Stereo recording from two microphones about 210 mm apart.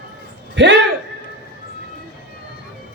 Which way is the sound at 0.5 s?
60° right (ahead or behind).